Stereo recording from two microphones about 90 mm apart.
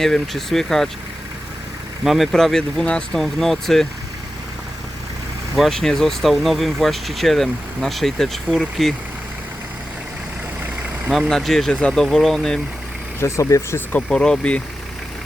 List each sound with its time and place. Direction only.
0.0 s speech: 5° left (ahead or behind)
2.0 s speech: centre (ahead or behind)
5.5 s speech: centre (ahead or behind)
11.1 s speech: centre (ahead or behind)
13.1 s speech: 30° left (ahead or behind)
14.1 s speech: 10° left (ahead or behind)